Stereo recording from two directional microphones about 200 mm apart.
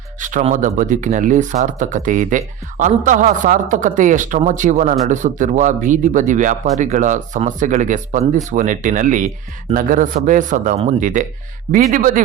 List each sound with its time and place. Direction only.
0.2 s speech: 40° right (ahead or behind)